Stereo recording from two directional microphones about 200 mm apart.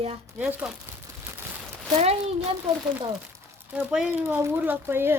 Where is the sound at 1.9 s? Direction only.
35° right (ahead or behind).